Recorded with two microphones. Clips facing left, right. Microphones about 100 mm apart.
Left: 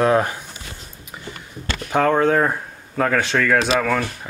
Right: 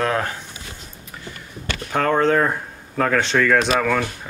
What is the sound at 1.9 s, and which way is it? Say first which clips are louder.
Speech: left 1 dB; 10° left (ahead or behind).